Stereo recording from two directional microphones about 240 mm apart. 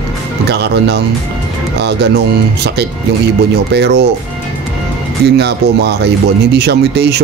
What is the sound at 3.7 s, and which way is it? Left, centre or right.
Speech, right.